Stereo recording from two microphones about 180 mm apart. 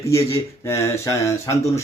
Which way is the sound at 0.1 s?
15° left (ahead or behind).